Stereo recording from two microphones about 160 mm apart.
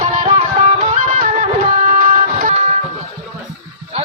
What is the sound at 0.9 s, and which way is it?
Music, 55° right (ahead or behind).